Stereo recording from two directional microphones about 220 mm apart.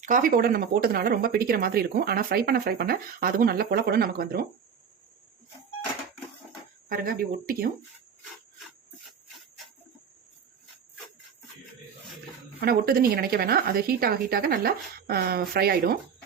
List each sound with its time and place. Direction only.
0.0 s speech: 35° right (ahead or behind)
6.8 s speech: 40° right (ahead or behind)
12.5 s speech: 45° right (ahead or behind)